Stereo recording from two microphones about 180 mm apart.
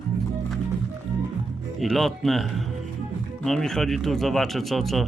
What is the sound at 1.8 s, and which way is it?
Speech, centre (ahead or behind).